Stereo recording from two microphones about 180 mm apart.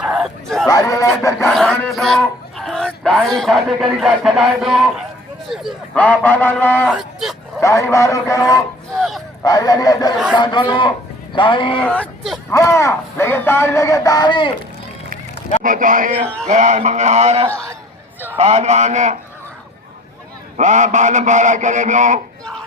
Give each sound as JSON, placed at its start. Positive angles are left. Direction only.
{"t": 0.0, "sound": "a sound", "side_deg": -5}
{"t": 0.6, "sound": "speech", "side_deg": 20}
{"t": 1.5, "sound": "speech", "side_deg": 5}
{"t": 6.8, "sound": "speech", "side_deg": 0}
{"t": 7.6, "sound": "speech", "side_deg": 15}
{"t": 9.0, "sound": "a sound", "side_deg": 0}
{"t": 9.4, "sound": "speech", "side_deg": 20}
{"t": 11.8, "sound": "speech", "side_deg": 5}
{"t": 12.5, "sound": "speech", "side_deg": 15}
{"t": 15.6, "sound": "a man's voice", "side_deg": -50}
{"t": 20.6, "sound": "a man's voice", "side_deg": -40}